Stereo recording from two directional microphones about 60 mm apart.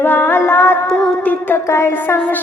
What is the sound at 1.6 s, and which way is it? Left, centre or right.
Speech, left.